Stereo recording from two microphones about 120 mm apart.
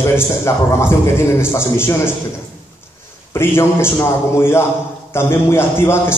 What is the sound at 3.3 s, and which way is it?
A man's voice, 20° left (ahead or behind).